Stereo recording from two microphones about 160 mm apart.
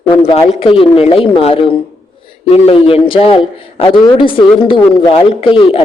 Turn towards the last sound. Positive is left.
turn(degrees=35)  # may be behind; listen again after turning